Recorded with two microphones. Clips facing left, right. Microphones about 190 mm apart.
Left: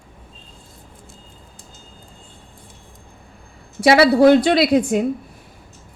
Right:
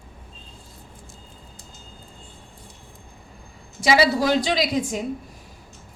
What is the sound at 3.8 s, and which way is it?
A woman's voice, 60° left (ahead or behind).